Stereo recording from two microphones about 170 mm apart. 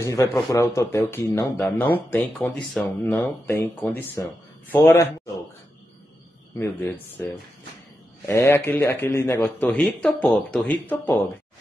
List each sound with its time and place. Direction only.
0.0 s speech: 15° left (ahead or behind)
7.2 s speech: 10° left (ahead or behind)